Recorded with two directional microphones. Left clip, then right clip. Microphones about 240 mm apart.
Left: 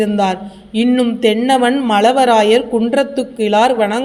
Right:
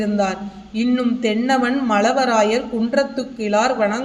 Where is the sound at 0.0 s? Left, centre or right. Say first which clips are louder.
Left 5 dB; left.